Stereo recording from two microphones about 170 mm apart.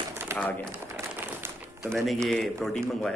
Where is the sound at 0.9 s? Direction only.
15° right (ahead or behind).